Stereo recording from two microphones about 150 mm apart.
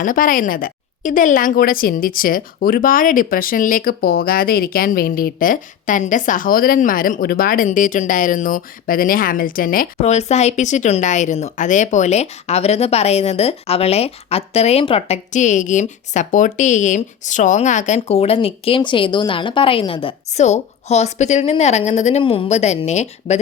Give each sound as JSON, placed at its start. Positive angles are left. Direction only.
{"t": 0.0, "sound": "a woman's voice", "side_deg": 65}
{"t": 10.0, "sound": "a woman's voice", "side_deg": 45}
{"t": 22.2, "sound": "speech", "side_deg": 40}